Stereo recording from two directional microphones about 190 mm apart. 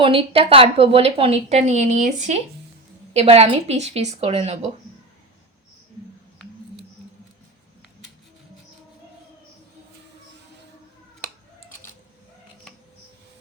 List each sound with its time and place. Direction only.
0.0 s a woman's voice: 30° right (ahead or behind)